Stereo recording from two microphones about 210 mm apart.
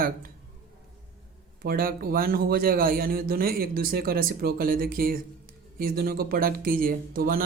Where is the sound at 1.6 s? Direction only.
45° right (ahead or behind).